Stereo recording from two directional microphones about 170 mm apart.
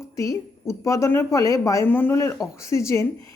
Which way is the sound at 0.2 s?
20° left (ahead or behind).